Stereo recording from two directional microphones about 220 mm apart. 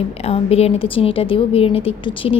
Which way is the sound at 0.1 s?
25° left (ahead or behind).